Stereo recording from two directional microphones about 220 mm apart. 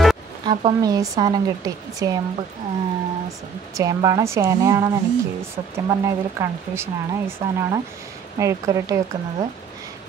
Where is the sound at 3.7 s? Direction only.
15° right (ahead or behind).